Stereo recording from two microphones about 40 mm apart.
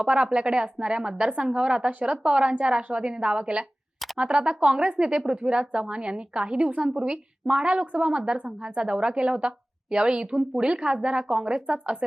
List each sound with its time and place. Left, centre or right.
0.0 s a woman's voice: right
1.9 s speech: right
2.1 s a woman's voice: right
11.6 s speech: right